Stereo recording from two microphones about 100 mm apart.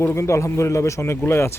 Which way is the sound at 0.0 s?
25° left (ahead or behind).